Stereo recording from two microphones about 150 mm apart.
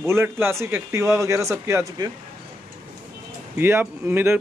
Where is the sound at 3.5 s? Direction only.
15° right (ahead or behind).